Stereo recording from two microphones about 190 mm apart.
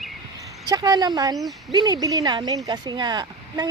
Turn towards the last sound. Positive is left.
turn(degrees=-25)  # may be behind; listen again after turning